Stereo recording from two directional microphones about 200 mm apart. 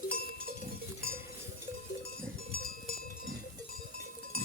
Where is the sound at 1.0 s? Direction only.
50° left (ahead or behind).